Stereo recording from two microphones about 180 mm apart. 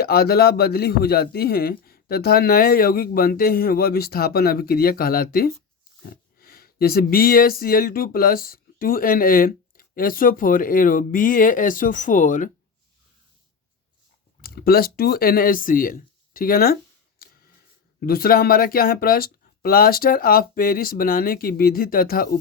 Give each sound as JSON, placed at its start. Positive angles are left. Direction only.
{"t": 0.0, "sound": "speech", "side_deg": 60}
{"t": 14.4, "sound": "speech", "side_deg": 55}
{"t": 17.2, "sound": "a sound", "side_deg": 55}
{"t": 18.0, "sound": "speech", "side_deg": 55}